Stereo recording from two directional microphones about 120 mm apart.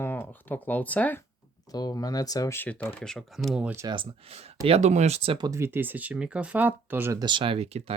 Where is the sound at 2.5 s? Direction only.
15° left (ahead or behind).